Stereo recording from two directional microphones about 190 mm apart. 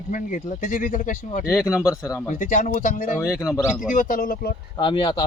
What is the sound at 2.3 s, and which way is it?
Speech, 45° left (ahead or behind).